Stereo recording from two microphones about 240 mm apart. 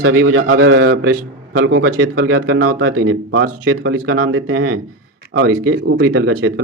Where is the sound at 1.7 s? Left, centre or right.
Right.